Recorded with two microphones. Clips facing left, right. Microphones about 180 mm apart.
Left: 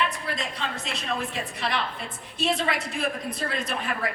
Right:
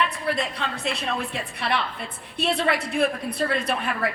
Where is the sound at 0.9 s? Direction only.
60° right (ahead or behind).